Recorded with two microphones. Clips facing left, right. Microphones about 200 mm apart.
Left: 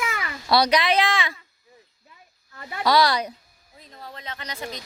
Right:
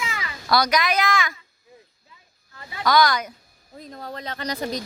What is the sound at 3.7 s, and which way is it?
Speech, 45° right (ahead or behind).